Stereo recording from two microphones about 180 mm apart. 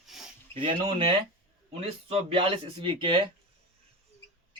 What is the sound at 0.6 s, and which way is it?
Speech, 30° right (ahead or behind).